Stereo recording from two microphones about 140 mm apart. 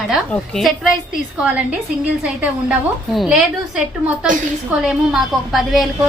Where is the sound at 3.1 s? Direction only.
5° right (ahead or behind).